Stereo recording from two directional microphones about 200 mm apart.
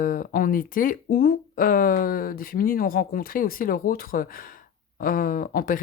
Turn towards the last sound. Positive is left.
turn(degrees=45)  # may be behind; listen again after turning